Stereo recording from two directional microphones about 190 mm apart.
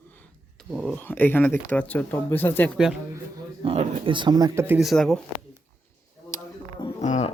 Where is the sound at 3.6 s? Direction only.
30° right (ahead or behind).